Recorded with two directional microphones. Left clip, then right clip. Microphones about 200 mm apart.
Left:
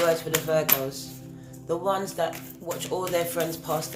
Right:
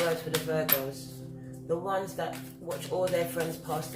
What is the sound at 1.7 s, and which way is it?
Speech, 50° left (ahead or behind).